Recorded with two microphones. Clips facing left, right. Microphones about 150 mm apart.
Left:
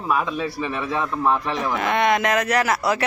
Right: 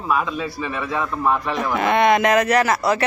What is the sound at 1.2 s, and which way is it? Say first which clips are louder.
Speech: right 1 dB; 5° right (ahead or behind).